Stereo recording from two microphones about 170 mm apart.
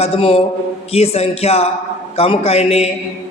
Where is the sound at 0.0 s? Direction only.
35° left (ahead or behind).